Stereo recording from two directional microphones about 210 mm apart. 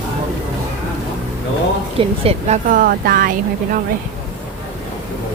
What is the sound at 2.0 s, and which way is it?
Speech, 30° right (ahead or behind).